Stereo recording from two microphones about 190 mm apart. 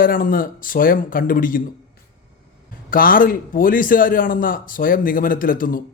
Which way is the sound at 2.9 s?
50° left (ahead or behind).